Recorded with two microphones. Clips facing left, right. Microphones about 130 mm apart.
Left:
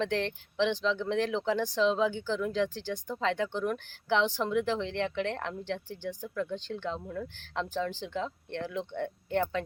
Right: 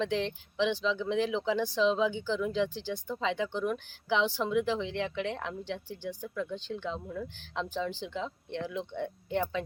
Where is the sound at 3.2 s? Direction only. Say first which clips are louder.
Left 1 dB; 15° right (ahead or behind).